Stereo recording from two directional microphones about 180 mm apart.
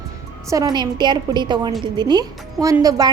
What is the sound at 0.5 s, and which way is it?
A woman's voice, 20° right (ahead or behind).